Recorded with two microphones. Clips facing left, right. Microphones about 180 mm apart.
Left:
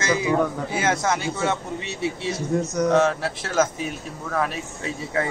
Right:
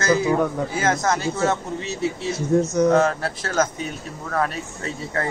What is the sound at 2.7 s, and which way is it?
Speech, 5° right (ahead or behind).